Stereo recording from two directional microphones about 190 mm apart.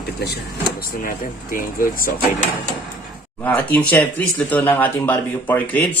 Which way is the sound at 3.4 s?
10° left (ahead or behind).